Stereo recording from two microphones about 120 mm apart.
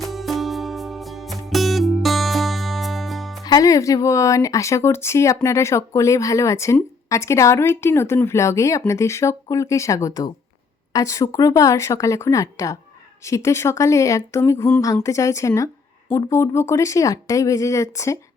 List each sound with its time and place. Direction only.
0.0 s music: centre (ahead or behind)
3.4 s speech: 30° left (ahead or behind)